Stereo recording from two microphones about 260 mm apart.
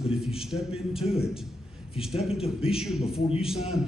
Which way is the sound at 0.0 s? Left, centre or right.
Centre.